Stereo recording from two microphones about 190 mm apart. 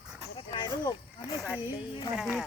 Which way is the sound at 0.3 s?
25° left (ahead or behind).